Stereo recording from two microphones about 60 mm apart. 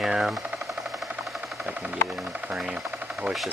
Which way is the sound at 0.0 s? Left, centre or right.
Centre.